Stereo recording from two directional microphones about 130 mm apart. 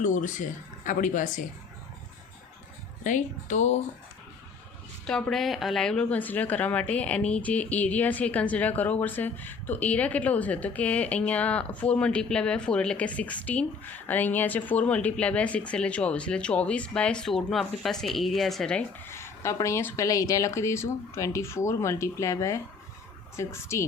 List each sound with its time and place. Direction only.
0.0 s speech: 80° left
3.0 s speech: 75° left (ahead or behind)
5.0 s speech: 5° left (ahead or behind)
19.0 s a sound: 20° left (ahead or behind)
19.5 s speech: 20° left (ahead or behind)